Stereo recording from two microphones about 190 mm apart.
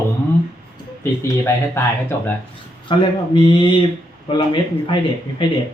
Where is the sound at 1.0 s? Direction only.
15° left (ahead or behind).